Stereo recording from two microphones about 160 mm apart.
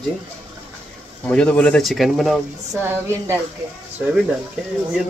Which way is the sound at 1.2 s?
5° left (ahead or behind).